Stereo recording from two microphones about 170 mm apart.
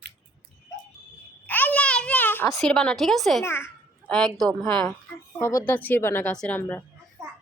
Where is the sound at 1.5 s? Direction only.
10° left (ahead or behind).